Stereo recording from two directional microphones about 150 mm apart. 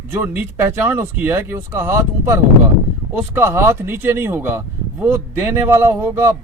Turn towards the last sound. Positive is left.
turn(degrees=-15)  # may be behind; listen again after turning